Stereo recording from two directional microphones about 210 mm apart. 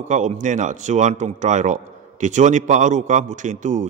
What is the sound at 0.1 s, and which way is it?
A man's voice, 35° right (ahead or behind).